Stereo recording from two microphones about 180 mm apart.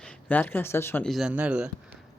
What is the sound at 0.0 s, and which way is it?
Speech, 10° left (ahead or behind).